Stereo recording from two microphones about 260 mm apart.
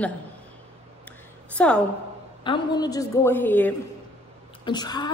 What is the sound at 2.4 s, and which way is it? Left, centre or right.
A woman's voice, centre.